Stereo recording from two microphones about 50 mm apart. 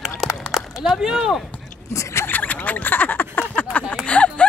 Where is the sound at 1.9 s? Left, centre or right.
Left.